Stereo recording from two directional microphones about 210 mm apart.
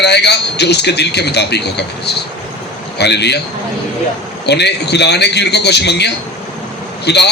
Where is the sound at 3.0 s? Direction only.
55° left (ahead or behind).